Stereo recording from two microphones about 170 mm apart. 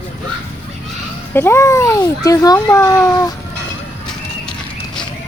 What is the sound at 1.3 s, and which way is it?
A child's voice, 15° left (ahead or behind).